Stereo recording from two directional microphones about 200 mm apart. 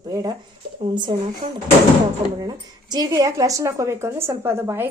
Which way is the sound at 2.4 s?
20° right (ahead or behind).